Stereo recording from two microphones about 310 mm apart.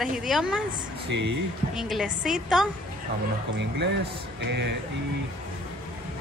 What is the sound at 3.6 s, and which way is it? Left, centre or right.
Speech, right.